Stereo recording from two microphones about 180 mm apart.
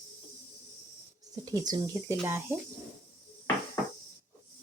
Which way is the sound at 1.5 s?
20° right (ahead or behind).